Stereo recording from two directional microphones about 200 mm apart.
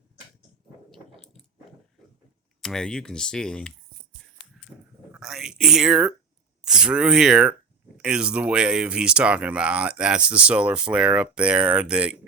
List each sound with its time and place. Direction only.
0.9 s ratchet: centre (ahead or behind)
2.6 s speech: centre (ahead or behind)
4.6 s a sound: centre (ahead or behind)
5.1 s speech: 5° right (ahead or behind)